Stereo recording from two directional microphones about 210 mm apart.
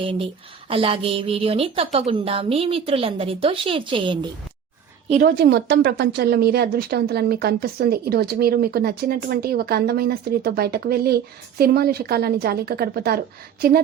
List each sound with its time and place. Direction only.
0.0 s a woman's voice: 25° right (ahead or behind)
5.3 s a woman's voice: 55° right (ahead or behind)